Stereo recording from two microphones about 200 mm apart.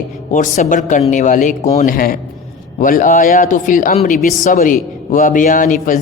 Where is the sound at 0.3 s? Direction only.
40° left (ahead or behind).